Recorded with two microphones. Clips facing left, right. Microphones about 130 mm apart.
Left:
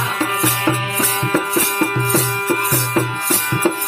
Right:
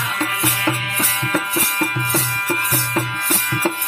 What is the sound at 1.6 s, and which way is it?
Music, 30° left (ahead or behind).